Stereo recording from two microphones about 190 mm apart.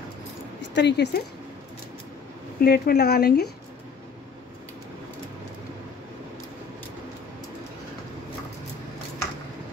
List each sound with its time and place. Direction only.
0.6 s speech: 65° left (ahead or behind)
2.6 s speech: 60° left (ahead or behind)